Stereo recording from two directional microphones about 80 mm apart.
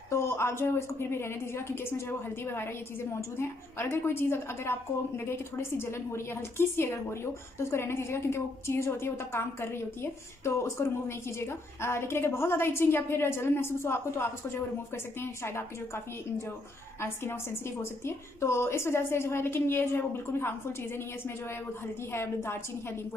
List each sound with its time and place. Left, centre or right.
0.1 s a woman's voice: left
15.4 s a woman's voice: left
22.1 s a woman's voice: left